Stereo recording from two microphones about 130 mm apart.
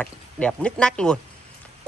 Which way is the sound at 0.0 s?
10° left (ahead or behind).